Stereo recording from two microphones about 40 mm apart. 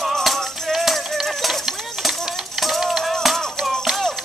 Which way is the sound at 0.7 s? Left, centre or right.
Centre.